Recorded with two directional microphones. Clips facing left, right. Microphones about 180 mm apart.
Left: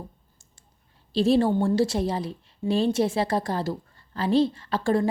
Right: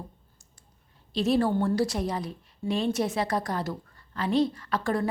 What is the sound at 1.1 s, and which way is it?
A woman's voice, 30° left (ahead or behind).